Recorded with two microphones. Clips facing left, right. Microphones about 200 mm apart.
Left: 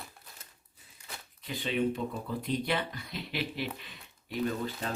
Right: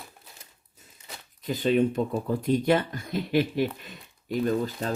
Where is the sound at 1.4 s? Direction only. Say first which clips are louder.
Right 8 dB; 45° right (ahead or behind).